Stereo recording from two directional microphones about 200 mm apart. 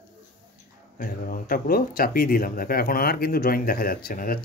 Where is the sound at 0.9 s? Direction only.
45° left (ahead or behind).